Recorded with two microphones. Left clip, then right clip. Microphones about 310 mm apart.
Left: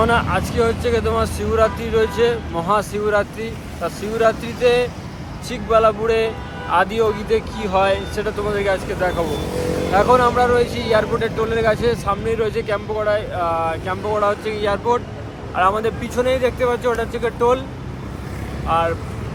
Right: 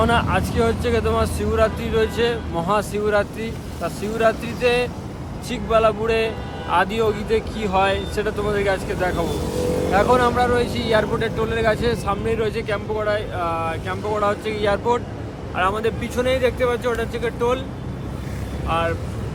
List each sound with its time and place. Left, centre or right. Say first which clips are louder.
0.0 s speech: left 2 dB; centre
9.2 s speech: left 2 dB; left
9.9 s speech: left 3 dB; centre
18.7 s speech: left 4 dB; centre